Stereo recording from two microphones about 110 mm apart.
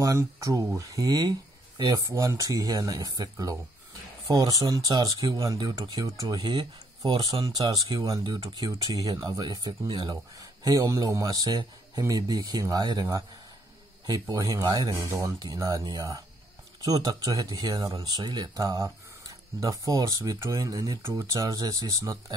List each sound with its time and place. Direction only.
0.0 s speech: 30° right (ahead or behind)
6.4 s speech: 50° right (ahead or behind); by 13.2 s 30° right (ahead or behind)
14.3 s speech: 35° right (ahead or behind)
21.4 s speech: 35° right (ahead or behind)